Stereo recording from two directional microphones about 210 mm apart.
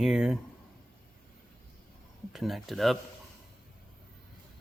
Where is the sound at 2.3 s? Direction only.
Centre (ahead or behind).